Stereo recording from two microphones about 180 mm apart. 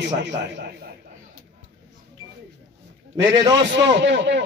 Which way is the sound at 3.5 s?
85° right.